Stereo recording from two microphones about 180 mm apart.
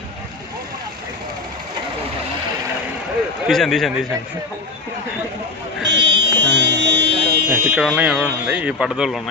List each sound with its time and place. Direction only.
3.4 s speech: centre (ahead or behind)
5.8 s speech: 80° right
7.4 s speech: 5° right (ahead or behind)